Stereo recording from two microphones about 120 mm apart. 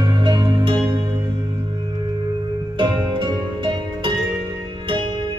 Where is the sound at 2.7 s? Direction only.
40° right (ahead or behind).